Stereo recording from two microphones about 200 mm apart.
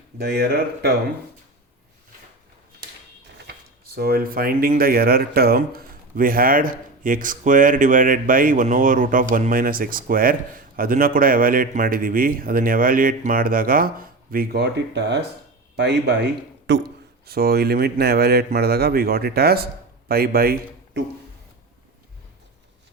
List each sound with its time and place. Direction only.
0.2 s speech: 50° right (ahead or behind)
3.9 s speech: 50° right (ahead or behind)
17.2 s a man's voice: 50° right (ahead or behind)